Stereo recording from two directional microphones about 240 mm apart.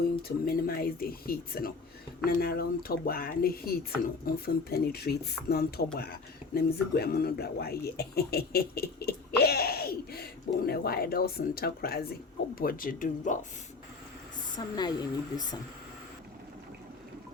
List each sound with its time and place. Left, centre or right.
0.2 s speech: left
14.5 s a woman's voice: centre